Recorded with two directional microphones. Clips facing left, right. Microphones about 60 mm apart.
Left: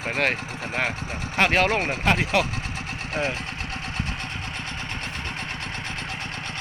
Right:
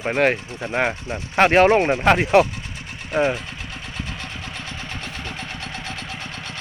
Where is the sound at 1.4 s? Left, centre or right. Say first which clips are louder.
Right 7 dB; right.